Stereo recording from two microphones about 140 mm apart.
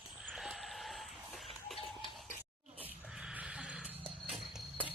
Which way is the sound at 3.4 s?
5° right (ahead or behind).